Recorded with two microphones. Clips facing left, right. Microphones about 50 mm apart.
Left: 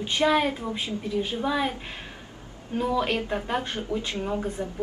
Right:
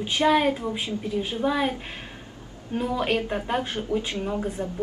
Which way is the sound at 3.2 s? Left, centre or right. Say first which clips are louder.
Right 1 dB; centre.